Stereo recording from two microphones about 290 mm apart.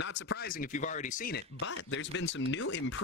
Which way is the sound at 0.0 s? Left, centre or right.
Left.